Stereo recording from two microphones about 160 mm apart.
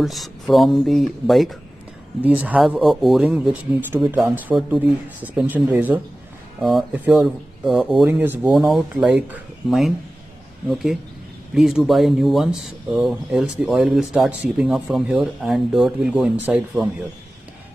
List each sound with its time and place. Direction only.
0.0 s speech: centre (ahead or behind)
6.6 s speech: centre (ahead or behind)
8.1 s speech: 10° right (ahead or behind)
8.5 s speech: centre (ahead or behind)